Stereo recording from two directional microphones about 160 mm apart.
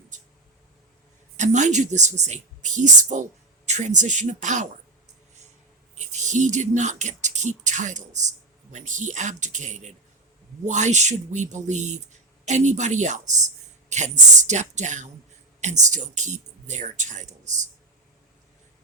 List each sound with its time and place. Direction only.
0.1 s a sound: 50° right (ahead or behind)
1.4 s speech: 50° right (ahead or behind)
6.0 s speech: 50° right (ahead or behind)